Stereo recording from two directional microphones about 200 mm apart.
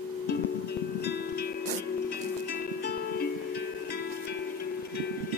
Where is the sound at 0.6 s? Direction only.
55° left (ahead or behind).